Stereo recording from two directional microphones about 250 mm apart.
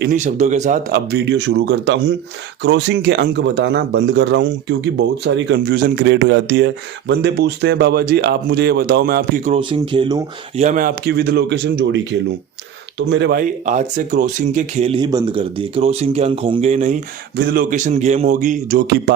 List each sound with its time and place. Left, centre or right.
0.1 s speech: right
0.9 s speech: right; by 10.6 s centre
10.6 s speech: right
19.1 s speech: right